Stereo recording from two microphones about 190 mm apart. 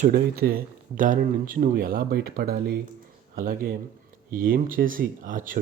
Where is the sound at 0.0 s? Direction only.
50° right (ahead or behind).